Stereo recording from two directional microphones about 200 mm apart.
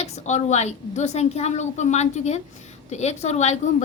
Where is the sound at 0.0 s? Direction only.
35° left (ahead or behind).